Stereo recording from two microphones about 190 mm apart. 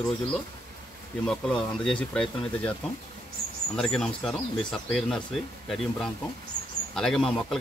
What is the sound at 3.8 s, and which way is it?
Speech, centre (ahead or behind).